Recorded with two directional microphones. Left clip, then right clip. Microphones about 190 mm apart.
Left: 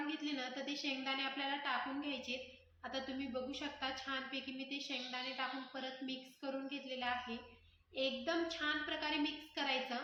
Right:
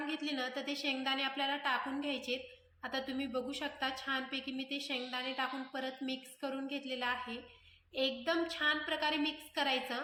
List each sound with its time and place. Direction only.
0.1 s a woman's voice: 35° right (ahead or behind)